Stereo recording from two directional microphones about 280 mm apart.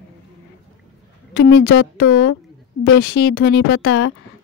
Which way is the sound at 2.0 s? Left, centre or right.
Left.